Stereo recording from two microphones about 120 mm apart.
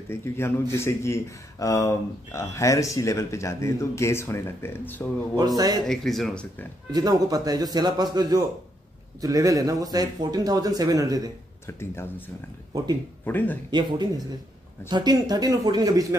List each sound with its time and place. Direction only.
0.1 s speech: 20° left (ahead or behind)
5.3 s a man's voice: 35° right (ahead or behind)
5.9 s speech: 5° left (ahead or behind)
6.9 s a man's voice: 30° right (ahead or behind)
11.6 s speech: 20° left (ahead or behind)
13.2 s speech: 15° left (ahead or behind)
13.7 s a man's voice: 40° right (ahead or behind)